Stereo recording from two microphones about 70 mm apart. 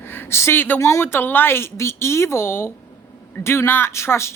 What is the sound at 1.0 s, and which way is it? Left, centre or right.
Speech, left.